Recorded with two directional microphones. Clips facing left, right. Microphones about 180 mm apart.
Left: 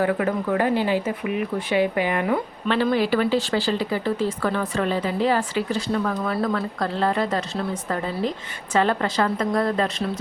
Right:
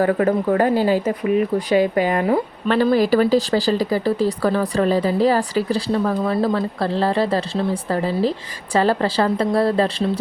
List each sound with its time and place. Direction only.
0.0 s speech: 40° right (ahead or behind)